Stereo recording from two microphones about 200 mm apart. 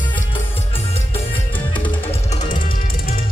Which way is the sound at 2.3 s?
35° left (ahead or behind).